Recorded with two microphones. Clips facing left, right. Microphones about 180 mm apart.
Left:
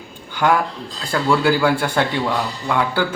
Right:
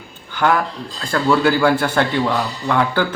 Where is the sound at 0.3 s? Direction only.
10° left (ahead or behind).